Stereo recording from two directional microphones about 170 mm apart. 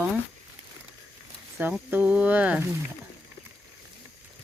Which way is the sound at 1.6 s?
10° right (ahead or behind).